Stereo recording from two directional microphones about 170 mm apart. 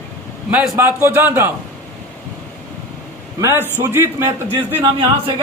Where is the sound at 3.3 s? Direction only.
15° right (ahead or behind).